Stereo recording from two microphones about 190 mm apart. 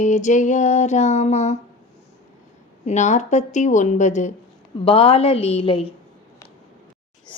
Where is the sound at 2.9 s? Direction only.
40° left (ahead or behind).